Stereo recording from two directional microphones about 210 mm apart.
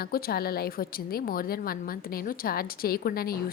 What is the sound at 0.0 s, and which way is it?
A woman's voice, 45° left (ahead or behind).